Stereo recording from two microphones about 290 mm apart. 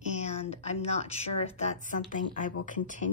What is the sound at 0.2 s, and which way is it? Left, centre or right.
A woman's voice, left.